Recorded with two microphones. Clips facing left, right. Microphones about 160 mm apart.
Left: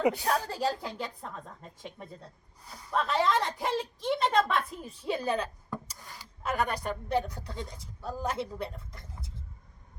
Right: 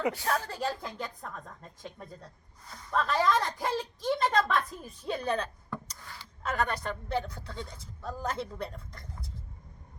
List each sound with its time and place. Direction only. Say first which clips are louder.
0.0 s a woman's voice: left 3 dB; 15° left (ahead or behind)
0.4 s a woman's voice: left 3 dB; 35° left (ahead or behind)
2.6 s a woman's voice: even; 10° left (ahead or behind)
3.0 s a woman's voice: even; 25° left (ahead or behind)
5.0 s speech: left 1 dB; 5° left (ahead or behind)